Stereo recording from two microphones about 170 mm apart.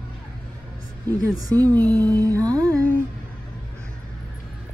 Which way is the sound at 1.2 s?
20° right (ahead or behind).